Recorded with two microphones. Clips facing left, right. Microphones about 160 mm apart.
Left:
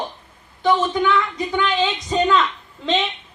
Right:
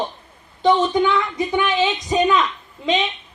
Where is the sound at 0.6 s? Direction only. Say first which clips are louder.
Right 2 dB; 20° right (ahead or behind).